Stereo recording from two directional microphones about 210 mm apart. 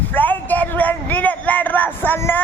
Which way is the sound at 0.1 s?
10° left (ahead or behind).